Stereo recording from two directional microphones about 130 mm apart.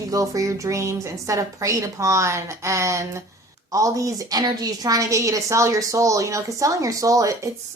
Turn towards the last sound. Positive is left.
turn(degrees=-25)  # may be behind; listen again after turning